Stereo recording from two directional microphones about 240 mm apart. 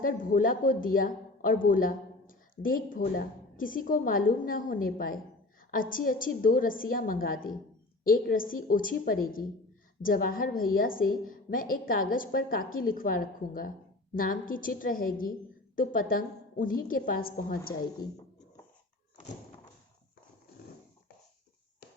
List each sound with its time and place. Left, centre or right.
0.0 s speech: left